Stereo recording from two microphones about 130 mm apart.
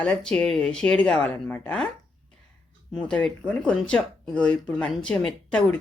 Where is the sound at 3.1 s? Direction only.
5° left (ahead or behind).